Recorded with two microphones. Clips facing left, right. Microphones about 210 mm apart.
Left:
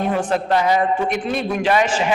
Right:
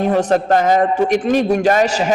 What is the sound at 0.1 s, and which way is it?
A man's voice, 40° right (ahead or behind).